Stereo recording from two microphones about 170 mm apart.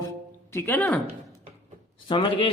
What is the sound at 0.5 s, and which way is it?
Speech, 10° left (ahead or behind).